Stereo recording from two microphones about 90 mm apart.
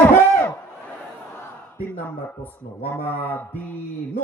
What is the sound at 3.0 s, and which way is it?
Speech, 20° left (ahead or behind).